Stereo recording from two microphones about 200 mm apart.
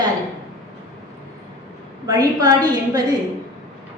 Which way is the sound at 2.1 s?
20° right (ahead or behind).